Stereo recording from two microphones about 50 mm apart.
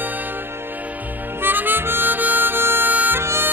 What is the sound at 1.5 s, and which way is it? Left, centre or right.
Harmonica, right.